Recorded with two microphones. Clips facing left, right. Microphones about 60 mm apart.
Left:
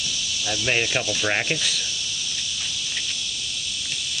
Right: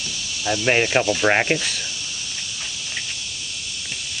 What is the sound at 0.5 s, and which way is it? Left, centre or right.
Speech, right.